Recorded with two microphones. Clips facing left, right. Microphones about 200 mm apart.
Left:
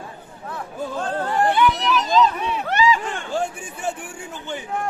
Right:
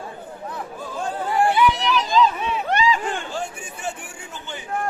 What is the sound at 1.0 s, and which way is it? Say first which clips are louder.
Chatter: right 1 dB; 10° right (ahead or behind).